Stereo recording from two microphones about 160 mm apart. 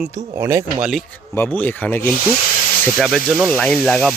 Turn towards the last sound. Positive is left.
turn(degrees=5)  # may be behind; listen again after turning